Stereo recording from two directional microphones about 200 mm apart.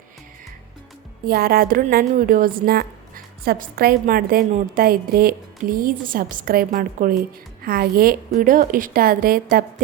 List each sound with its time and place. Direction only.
1.3 s a woman's voice: 50° right (ahead or behind)